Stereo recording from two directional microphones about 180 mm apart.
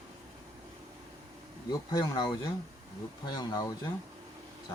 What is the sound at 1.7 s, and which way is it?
Speech, 20° left (ahead or behind).